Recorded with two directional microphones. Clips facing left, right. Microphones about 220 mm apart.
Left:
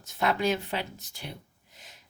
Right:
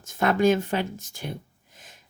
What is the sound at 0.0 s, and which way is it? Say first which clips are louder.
Speech: right 6 dB; 50° right (ahead or behind).